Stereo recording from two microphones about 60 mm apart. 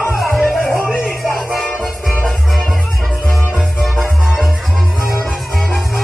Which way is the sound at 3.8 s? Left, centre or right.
Centre.